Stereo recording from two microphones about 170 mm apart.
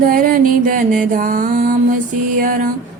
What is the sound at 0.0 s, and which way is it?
Music, 55° right (ahead or behind).